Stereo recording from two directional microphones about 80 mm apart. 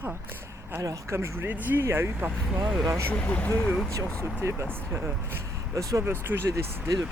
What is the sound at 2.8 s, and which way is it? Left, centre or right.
Speech, right.